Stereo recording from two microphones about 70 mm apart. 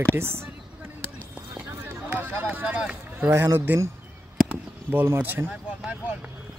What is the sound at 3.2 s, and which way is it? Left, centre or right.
Speech, right.